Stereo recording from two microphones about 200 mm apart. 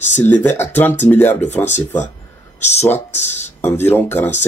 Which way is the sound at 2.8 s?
10° left (ahead or behind).